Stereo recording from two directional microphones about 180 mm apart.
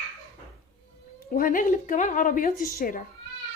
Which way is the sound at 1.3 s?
50° left (ahead or behind).